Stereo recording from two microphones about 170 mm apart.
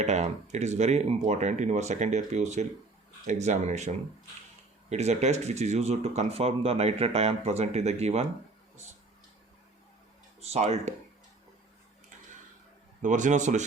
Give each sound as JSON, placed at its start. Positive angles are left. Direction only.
{"t": 0.0, "sound": "speech", "side_deg": -40}
{"t": 10.4, "sound": "speech", "side_deg": -40}
{"t": 13.0, "sound": "speech", "side_deg": -45}